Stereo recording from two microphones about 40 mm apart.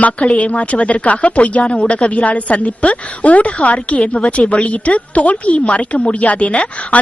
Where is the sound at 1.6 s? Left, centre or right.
Left.